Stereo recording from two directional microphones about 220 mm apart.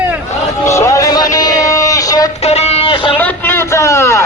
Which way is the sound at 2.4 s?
30° left (ahead or behind).